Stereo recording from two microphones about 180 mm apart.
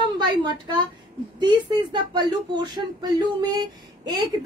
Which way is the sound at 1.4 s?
25° right (ahead or behind).